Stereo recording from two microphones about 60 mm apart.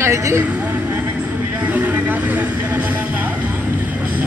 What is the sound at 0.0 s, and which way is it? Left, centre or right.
Speech, right.